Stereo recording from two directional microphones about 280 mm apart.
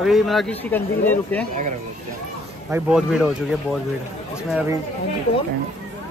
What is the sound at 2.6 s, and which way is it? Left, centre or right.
Speech, centre.